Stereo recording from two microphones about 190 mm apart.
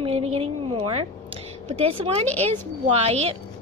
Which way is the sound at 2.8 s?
30° right (ahead or behind).